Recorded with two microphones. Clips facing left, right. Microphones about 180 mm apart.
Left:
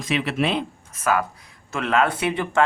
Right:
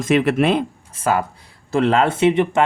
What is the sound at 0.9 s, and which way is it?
Speech, 30° right (ahead or behind).